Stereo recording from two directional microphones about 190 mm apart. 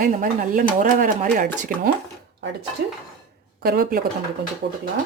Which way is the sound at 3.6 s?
55° right (ahead or behind).